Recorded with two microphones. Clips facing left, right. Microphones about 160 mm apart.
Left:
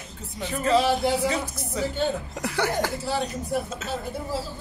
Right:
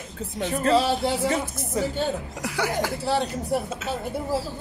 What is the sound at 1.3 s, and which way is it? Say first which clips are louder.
Speech: right 2 dB; 50° right (ahead or behind).